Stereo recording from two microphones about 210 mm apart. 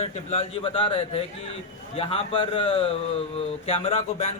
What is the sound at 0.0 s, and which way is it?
A man's voice, 30° left (ahead or behind).